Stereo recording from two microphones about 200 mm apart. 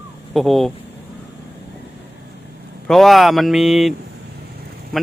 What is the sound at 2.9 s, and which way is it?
Speech, centre (ahead or behind).